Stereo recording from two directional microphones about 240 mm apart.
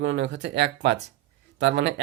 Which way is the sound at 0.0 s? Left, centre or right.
Right.